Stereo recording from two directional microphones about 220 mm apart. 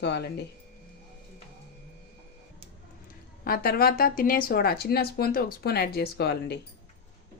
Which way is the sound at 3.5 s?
45° left (ahead or behind).